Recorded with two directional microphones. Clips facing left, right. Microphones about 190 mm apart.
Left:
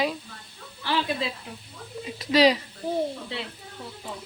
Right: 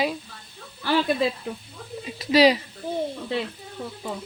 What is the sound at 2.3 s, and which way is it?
Speech, 5° right (ahead or behind).